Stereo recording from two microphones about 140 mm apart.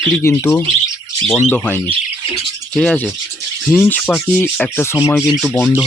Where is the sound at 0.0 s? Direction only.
15° left (ahead or behind).